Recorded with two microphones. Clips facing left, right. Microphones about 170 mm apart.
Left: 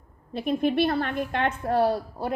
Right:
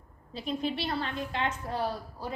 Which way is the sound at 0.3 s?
55° left (ahead or behind).